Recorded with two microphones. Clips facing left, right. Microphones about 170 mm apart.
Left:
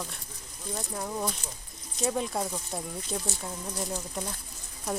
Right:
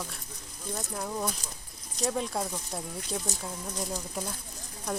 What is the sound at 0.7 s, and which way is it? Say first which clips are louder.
Speech: even; centre (ahead or behind).